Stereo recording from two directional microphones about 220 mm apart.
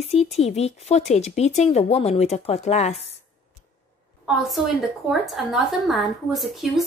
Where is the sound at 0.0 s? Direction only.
30° left (ahead or behind).